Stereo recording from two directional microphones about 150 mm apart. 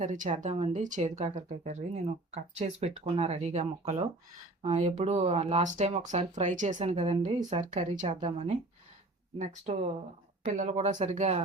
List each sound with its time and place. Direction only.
0.0 s speech: 55° right (ahead or behind)
8.0 s speech: 35° right (ahead or behind)
9.4 s speech: 50° right (ahead or behind)